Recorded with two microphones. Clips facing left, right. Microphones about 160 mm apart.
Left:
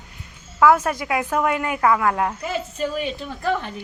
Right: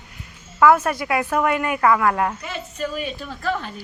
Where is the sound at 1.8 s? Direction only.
5° left (ahead or behind).